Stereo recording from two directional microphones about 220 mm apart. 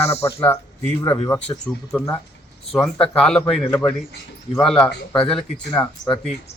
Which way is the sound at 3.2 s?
5° left (ahead or behind).